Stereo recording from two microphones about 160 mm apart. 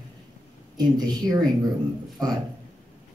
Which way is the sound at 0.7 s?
25° right (ahead or behind).